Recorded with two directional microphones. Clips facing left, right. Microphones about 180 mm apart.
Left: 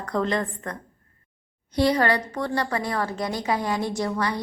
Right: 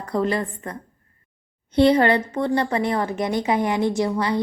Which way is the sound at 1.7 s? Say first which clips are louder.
Right 5 dB; 25° right (ahead or behind).